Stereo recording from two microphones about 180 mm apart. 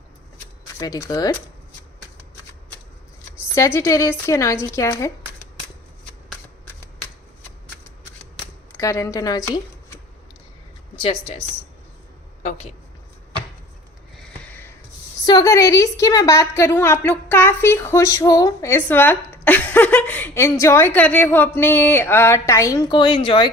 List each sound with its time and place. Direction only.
0.8 s speech: 20° left (ahead or behind)
3.5 s a woman's voice: 15° left (ahead or behind)
8.7 s speech: 15° left (ahead or behind)
10.9 s speech: 30° left (ahead or behind)
14.2 s sniff: 10° left (ahead or behind)
15.2 s a woman's voice: 20° left (ahead or behind)